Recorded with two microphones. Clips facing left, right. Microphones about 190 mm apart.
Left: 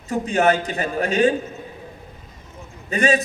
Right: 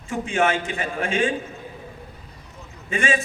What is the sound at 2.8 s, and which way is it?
Speech, 40° left (ahead or behind).